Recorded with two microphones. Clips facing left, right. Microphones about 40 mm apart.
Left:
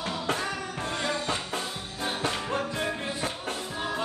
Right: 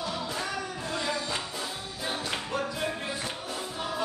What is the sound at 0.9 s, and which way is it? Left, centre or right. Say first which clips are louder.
Music: left 1 dB; left.